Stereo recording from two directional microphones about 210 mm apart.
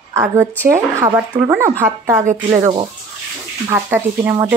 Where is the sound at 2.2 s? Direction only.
35° right (ahead or behind).